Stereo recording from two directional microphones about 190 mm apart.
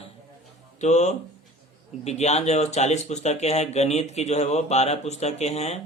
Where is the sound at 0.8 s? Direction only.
40° left (ahead or behind).